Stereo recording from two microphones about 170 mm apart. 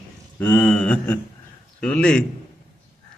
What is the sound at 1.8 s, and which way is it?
Speech, 5° left (ahead or behind).